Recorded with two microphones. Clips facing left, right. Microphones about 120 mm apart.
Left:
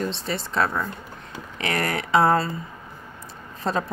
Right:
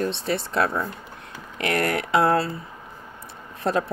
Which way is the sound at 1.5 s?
60° right (ahead or behind).